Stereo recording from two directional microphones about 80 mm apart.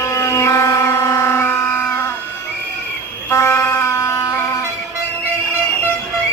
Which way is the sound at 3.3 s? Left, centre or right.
Left.